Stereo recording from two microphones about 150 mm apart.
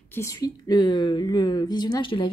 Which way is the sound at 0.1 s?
20° left (ahead or behind).